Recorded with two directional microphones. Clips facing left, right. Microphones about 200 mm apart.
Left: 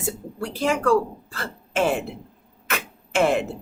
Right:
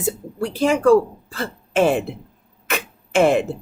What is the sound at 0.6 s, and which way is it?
A woman's voice, 20° right (ahead or behind).